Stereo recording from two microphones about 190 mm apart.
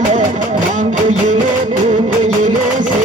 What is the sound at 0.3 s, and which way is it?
Music, 40° right (ahead or behind).